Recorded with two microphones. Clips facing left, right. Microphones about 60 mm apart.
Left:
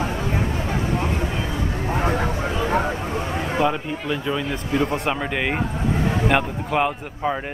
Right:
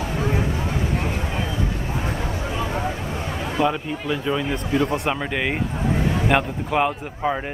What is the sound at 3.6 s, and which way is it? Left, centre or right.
Speech, centre.